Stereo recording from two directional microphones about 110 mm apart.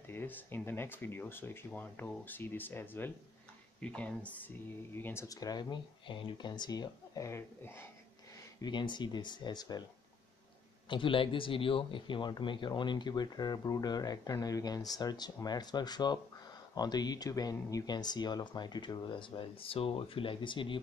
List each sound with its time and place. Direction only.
0.0 s speech: 20° left (ahead or behind)
5.3 s speech: 35° left (ahead or behind)
8.5 s speech: 45° left (ahead or behind)
10.9 s speech: 50° left (ahead or behind)